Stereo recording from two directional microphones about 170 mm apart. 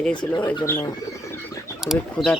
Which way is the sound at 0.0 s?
5° left (ahead or behind).